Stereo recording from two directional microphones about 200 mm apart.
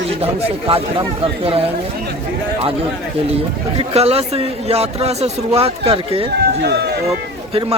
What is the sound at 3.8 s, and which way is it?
A man's voice, 30° right (ahead or behind).